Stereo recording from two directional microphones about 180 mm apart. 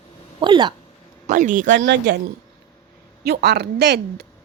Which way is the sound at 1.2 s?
45° right (ahead or behind).